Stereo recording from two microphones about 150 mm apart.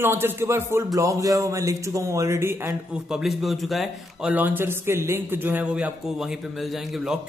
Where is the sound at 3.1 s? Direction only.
Centre (ahead or behind).